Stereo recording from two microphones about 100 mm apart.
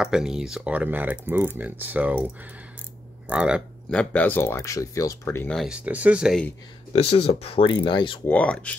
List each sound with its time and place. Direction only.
0.0 s speech: 5° right (ahead or behind)
3.9 s speech: 15° left (ahead or behind)
4.6 s speech: 30° left (ahead or behind)
5.7 s speech: 15° right (ahead or behind)
6.9 s speech: 80° left
7.6 s speech: 50° left (ahead or behind)
8.3 s speech: 15° left (ahead or behind)